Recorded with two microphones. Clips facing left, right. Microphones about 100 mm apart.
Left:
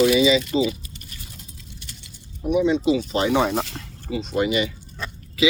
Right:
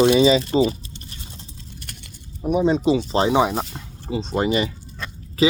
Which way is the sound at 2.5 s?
35° right (ahead or behind).